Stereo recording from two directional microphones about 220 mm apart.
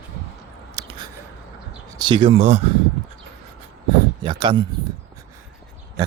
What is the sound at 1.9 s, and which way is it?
Speech, 20° right (ahead or behind).